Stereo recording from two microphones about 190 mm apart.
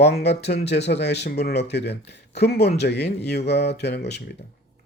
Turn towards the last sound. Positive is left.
turn(degrees=60)  # may be behind; listen again after turning